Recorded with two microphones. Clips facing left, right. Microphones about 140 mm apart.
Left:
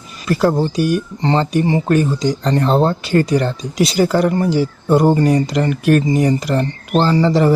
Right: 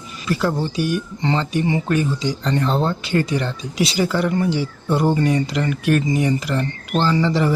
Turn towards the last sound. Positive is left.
turn(degrees=40)  # may be behind; listen again after turning